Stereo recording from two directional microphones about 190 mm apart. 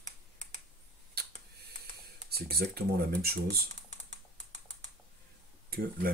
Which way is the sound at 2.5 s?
55° right (ahead or behind).